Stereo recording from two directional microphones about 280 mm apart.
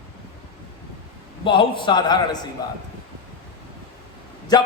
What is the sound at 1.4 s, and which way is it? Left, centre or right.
A man's voice, centre.